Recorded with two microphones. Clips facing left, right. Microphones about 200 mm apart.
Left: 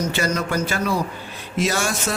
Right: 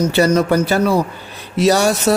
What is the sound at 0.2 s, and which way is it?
Speech, 35° right (ahead or behind).